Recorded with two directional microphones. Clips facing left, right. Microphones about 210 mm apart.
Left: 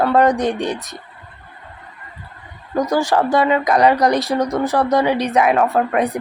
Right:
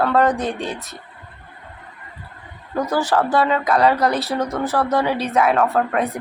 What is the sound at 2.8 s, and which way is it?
Speech, 15° left (ahead or behind).